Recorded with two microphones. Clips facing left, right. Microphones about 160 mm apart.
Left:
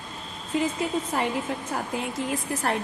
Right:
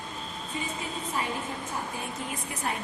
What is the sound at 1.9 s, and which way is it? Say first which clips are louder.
Speech: left 7 dB; 85° left.